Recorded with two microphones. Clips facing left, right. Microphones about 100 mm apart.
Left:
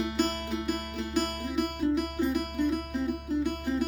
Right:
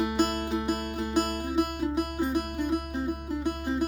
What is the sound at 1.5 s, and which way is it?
Music, 45° right (ahead or behind).